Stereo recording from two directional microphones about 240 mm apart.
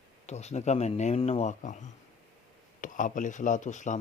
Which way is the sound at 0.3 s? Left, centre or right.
Left.